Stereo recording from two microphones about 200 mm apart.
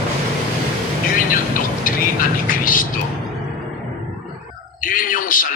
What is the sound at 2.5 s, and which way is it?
Vehicle, 45° left (ahead or behind).